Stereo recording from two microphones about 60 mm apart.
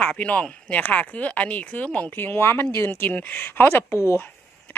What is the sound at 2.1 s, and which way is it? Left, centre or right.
Speech, left.